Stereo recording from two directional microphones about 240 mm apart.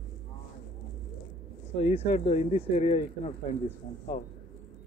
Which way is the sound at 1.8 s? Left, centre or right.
Left.